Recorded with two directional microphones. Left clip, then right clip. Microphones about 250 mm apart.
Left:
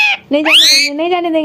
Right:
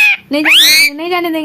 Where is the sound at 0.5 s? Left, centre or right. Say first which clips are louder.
Right 1 dB; centre.